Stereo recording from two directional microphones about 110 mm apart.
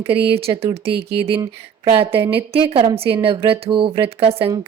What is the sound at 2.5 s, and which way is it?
Speech, 60° right (ahead or behind).